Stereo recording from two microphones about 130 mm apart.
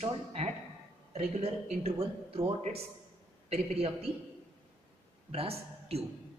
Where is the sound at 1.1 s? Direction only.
55° right (ahead or behind).